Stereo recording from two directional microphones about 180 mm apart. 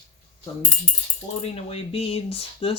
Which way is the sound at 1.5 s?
35° left (ahead or behind).